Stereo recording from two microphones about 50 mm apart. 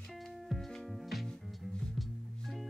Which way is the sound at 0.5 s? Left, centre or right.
Centre.